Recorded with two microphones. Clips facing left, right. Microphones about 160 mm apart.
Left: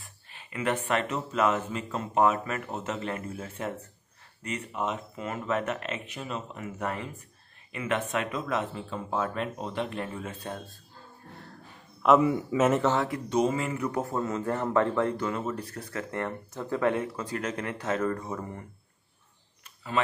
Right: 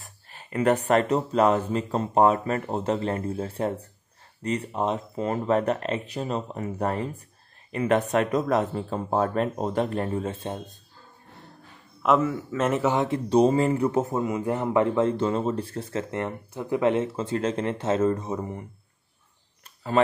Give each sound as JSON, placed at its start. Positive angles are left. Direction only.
{"t": 0.0, "sound": "speech", "side_deg": -40}
{"t": 12.2, "sound": "a man's voice", "side_deg": 15}
{"t": 12.5, "sound": "speech", "side_deg": 0}
{"t": 12.8, "sound": "a man's voice", "side_deg": -20}
{"t": 13.3, "sound": "a man's voice", "side_deg": -35}